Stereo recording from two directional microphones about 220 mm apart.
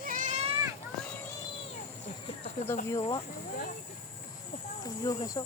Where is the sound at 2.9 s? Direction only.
20° left (ahead or behind).